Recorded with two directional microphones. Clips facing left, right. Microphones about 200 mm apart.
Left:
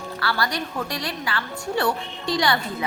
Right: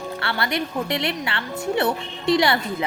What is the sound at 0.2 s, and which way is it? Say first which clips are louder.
Speech: even; 25° right (ahead or behind).